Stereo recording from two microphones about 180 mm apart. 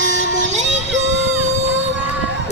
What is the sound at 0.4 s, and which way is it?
Music, 40° right (ahead or behind).